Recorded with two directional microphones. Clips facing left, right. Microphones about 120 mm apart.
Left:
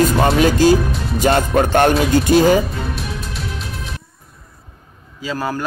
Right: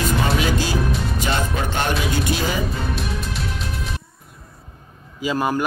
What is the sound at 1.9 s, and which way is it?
Speech, 45° left (ahead or behind).